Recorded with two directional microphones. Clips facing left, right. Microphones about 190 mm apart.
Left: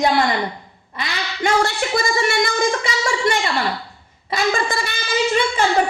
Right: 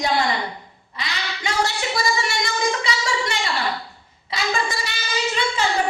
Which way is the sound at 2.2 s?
55° left (ahead or behind).